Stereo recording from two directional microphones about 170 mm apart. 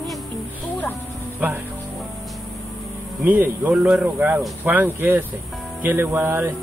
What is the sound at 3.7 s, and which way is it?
Speech, centre (ahead or behind).